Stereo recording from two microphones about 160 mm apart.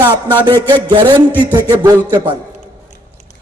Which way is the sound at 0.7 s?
30° right (ahead or behind).